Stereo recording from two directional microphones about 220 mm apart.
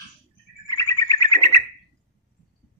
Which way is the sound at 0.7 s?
15° left (ahead or behind).